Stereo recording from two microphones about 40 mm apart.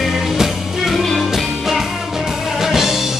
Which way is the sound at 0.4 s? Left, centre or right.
Centre.